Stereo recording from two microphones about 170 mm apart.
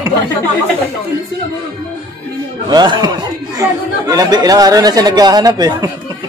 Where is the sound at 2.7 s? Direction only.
25° right (ahead or behind).